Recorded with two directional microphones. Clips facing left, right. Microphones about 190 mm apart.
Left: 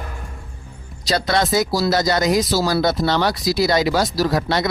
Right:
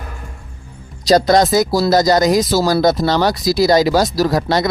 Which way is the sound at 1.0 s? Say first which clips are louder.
Right 8 dB; 40° right (ahead or behind).